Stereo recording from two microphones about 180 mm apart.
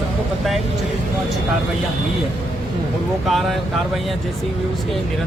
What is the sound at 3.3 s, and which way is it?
Speech, centre (ahead or behind).